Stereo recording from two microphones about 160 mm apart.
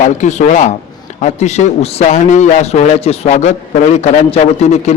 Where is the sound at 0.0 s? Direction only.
45° left (ahead or behind).